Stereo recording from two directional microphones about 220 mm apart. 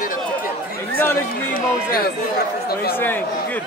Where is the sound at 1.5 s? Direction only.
40° left (ahead or behind).